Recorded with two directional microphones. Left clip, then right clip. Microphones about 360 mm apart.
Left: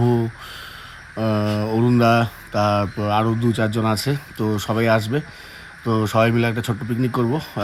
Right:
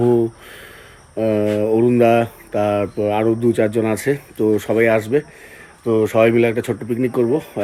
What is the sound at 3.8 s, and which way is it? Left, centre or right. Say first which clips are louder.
Speech: right 3 dB; centre.